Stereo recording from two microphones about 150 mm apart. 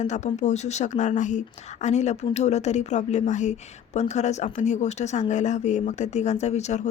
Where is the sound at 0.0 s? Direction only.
50° left (ahead or behind).